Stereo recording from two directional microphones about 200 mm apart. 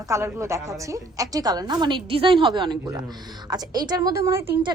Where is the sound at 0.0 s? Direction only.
15° right (ahead or behind).